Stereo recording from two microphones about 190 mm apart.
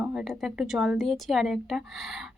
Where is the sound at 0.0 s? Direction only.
5° right (ahead or behind).